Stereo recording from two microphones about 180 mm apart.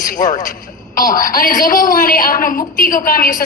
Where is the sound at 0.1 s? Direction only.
45° left (ahead or behind).